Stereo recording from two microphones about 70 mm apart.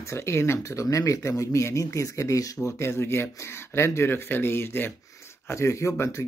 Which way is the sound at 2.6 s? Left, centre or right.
Left.